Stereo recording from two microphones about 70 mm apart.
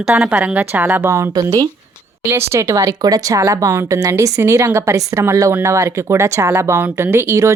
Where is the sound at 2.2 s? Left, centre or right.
Right.